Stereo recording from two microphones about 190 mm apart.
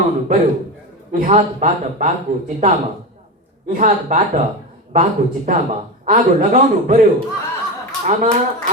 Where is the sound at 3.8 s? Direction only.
40° right (ahead or behind).